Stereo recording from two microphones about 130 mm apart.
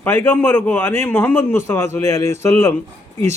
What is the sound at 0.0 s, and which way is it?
A man's voice, 15° left (ahead or behind).